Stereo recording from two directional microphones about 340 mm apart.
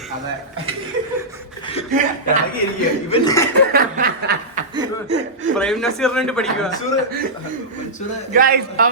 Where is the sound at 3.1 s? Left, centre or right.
Centre.